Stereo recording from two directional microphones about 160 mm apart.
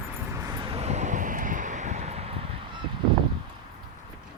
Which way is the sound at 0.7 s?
45° right (ahead or behind).